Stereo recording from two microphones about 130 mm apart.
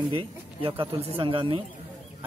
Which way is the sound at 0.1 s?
45° right (ahead or behind).